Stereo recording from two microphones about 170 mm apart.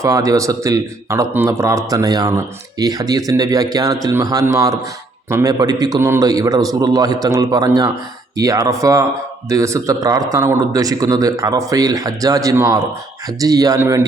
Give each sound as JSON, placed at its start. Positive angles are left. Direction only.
{"t": 0.0, "sound": "speech", "side_deg": -20}